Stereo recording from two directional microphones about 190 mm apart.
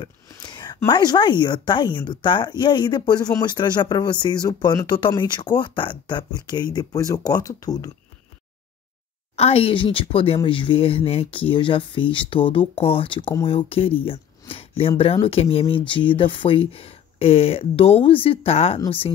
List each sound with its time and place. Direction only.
0.3 s a sound: 20° left (ahead or behind)
0.8 s speech: 25° left (ahead or behind)
9.3 s speech: 30° left (ahead or behind)